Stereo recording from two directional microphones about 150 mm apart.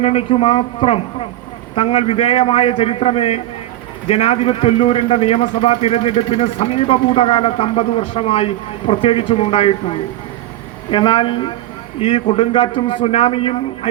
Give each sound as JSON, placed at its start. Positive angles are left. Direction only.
{"t": 0.0, "sound": "a man's voice", "side_deg": 40}